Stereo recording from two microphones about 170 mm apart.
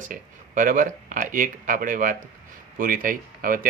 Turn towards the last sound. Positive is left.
turn(degrees=-55)  # may be behind; listen again after turning